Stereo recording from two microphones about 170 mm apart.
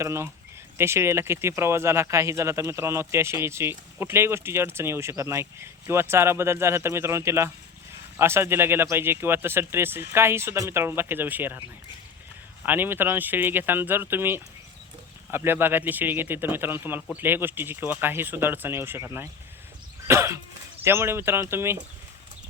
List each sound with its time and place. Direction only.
0.0 s speech: 15° right (ahead or behind)
12.6 s speech: 10° right (ahead or behind)